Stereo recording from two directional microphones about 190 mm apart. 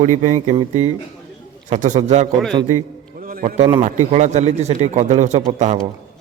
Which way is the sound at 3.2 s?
50° right (ahead or behind).